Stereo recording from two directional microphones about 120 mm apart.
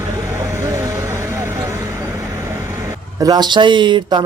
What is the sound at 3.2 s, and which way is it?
Speech, 35° right (ahead or behind).